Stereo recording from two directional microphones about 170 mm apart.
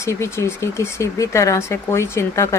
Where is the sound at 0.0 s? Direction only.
15° left (ahead or behind).